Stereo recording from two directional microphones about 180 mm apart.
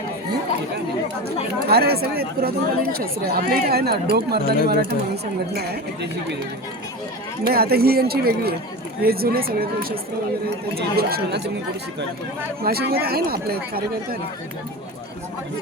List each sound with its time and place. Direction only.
1.6 s speech: 60° right (ahead or behind)
7.4 s speech: 60° right (ahead or behind)
12.6 s speech: 60° right (ahead or behind)